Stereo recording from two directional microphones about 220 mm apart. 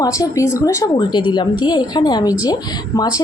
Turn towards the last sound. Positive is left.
turn(degrees=15)  # may be behind; listen again after turning